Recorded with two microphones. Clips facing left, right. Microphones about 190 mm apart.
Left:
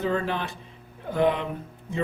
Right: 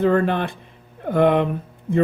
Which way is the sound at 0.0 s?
55° right (ahead or behind).